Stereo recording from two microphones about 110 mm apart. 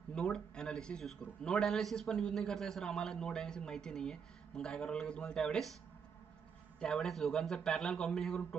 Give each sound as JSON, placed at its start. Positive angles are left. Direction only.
{"t": 0.1, "sound": "a man's voice", "side_deg": 5}
{"t": 6.8, "sound": "a man's voice", "side_deg": 5}